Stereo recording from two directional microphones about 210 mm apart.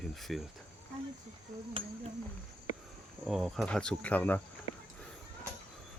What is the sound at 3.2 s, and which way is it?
Speech, centre (ahead or behind).